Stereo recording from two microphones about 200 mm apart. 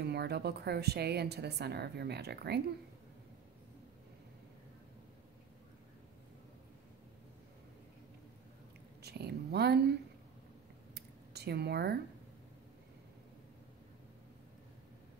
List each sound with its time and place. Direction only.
0.0 s a woman's voice: 55° right (ahead or behind)
9.0 s speech: 55° right (ahead or behind)
11.0 s a sound: 55° right (ahead or behind)